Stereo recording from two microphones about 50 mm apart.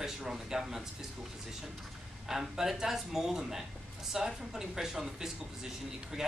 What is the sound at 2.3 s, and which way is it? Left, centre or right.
Speech, centre.